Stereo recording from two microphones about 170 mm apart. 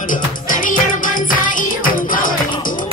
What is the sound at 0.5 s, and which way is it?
Music, 50° left (ahead or behind).